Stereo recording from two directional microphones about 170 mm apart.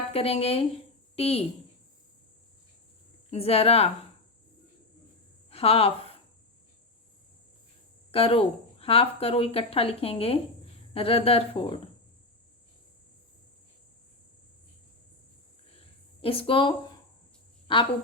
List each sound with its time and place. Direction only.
0.1 s a woman's voice: 35° left (ahead or behind)
3.3 s speech: 35° left (ahead or behind)
5.5 s a woman's voice: 35° left (ahead or behind)
8.1 s speech: 35° left (ahead or behind)
15.8 s a sound: 35° left (ahead or behind)
17.7 s a woman's voice: 30° left (ahead or behind)